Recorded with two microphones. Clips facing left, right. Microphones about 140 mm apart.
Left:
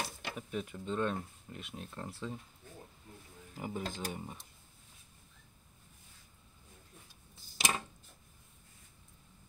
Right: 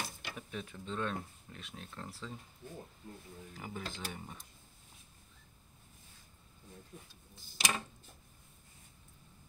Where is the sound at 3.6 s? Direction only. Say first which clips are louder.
Left 5 dB; 20° left (ahead or behind).